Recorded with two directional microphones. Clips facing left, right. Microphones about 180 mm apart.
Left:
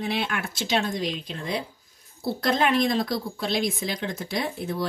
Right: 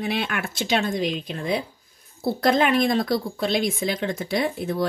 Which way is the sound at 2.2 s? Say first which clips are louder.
Right 4 dB; 55° right (ahead or behind).